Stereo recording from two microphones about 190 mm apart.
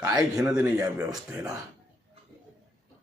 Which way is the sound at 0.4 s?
5° right (ahead or behind).